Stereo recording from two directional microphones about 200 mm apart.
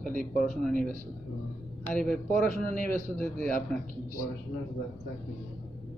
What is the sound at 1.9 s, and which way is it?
Speech, 5° left (ahead or behind).